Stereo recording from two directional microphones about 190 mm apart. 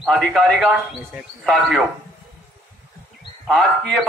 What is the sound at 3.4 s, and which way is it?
Speech, centre (ahead or behind).